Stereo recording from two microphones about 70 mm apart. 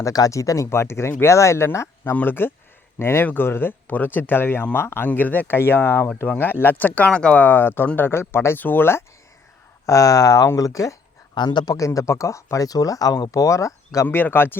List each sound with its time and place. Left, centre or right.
0.0 s speech: left
2.1 s speech: left; by 7.4 s centre
7.4 s speech: left
9.8 s speech: left
11.3 s a man's voice: left
11.9 s speech: left
14.1 s speech: left